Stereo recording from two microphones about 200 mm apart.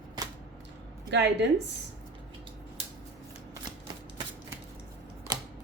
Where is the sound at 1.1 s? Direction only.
60° right (ahead or behind).